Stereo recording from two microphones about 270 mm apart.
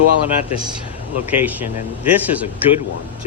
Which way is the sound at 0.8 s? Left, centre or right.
Centre.